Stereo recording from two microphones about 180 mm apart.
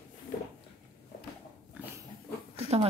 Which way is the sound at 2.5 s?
35° right (ahead or behind).